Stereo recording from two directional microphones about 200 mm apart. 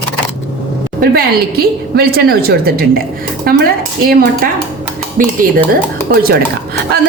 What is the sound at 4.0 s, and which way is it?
A woman's voice, 45° right (ahead or behind).